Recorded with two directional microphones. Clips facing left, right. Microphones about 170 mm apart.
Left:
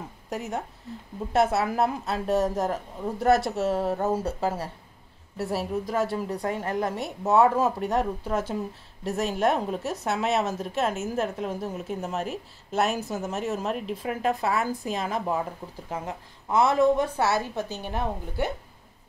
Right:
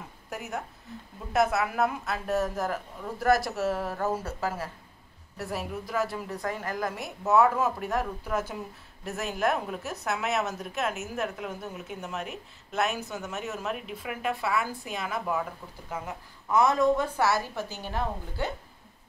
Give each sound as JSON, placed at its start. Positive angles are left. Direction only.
{"t": 1.3, "sound": "a woman's voice", "side_deg": 30}